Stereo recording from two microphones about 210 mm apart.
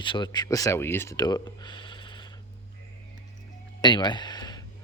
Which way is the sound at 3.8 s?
20° left (ahead or behind).